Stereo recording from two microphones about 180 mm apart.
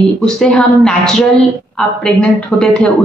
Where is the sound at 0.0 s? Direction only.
5° left (ahead or behind).